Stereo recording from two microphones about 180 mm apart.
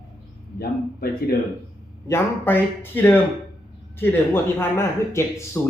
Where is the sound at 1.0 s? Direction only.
60° left (ahead or behind).